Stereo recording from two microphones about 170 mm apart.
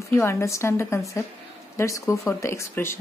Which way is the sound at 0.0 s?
15° left (ahead or behind).